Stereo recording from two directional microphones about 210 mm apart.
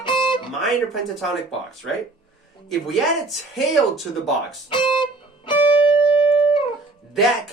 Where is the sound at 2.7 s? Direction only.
Centre (ahead or behind).